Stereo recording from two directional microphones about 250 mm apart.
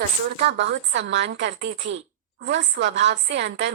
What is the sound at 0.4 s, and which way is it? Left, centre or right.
A woman's voice, right.